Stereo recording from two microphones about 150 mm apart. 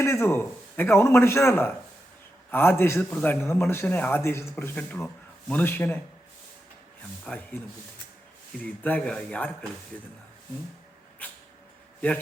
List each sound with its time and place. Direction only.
0.0 s a man's voice: 20° left (ahead or behind)
7.3 s a man's voice: 5° left (ahead or behind)
8.6 s a man's voice: 10° left (ahead or behind)